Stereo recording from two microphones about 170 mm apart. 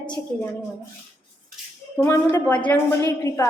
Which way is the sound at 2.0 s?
15° left (ahead or behind).